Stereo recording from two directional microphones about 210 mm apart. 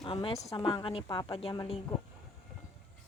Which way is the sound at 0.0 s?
25° left (ahead or behind).